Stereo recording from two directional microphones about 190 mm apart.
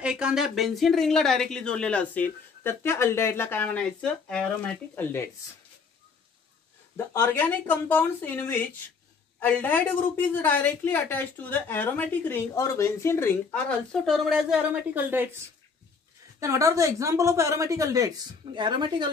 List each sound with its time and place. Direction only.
0.0 s a woman's voice: 5° right (ahead or behind); by 5.3 s 10° left (ahead or behind)
7.2 s a woman's voice: 10° left (ahead or behind); by 15.2 s 10° right (ahead or behind)
16.3 s a woman's voice: 15° right (ahead or behind)